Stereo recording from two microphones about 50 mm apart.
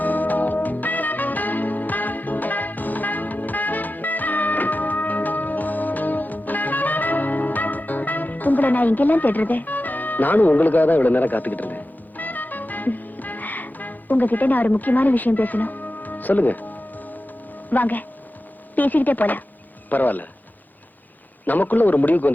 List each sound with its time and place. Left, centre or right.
0.0 s music: left
17.7 s a man's voice: left
21.4 s a man's voice: left